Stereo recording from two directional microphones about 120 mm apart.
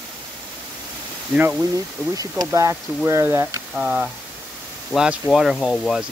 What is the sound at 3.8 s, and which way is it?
Speech, 10° right (ahead or behind).